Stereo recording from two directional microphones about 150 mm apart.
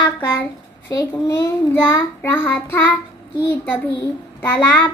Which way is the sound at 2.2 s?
15° left (ahead or behind).